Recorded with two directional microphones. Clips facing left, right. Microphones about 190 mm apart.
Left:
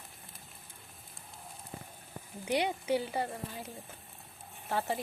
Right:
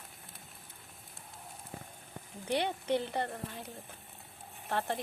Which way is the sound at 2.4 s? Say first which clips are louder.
Left 1 dB; 10° left (ahead or behind).